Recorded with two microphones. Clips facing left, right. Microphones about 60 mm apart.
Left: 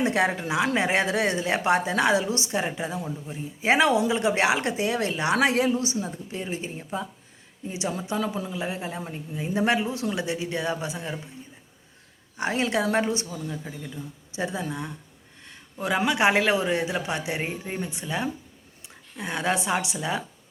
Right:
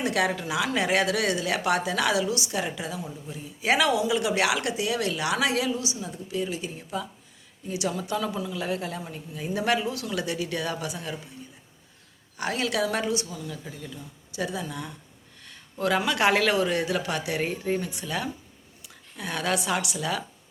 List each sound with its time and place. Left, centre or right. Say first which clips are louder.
0.0 s a woman's voice: left 2 dB; left
12.4 s speech: left 2 dB; left